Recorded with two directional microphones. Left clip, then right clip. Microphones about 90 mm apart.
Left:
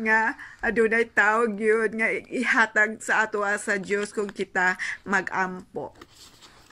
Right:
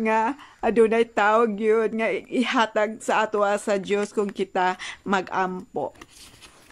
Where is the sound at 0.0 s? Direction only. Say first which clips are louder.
Even; 30° right (ahead or behind).